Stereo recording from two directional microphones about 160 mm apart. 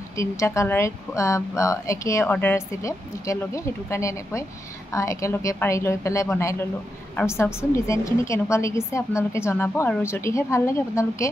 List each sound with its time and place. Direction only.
0.1 s a woman's voice: 20° left (ahead or behind)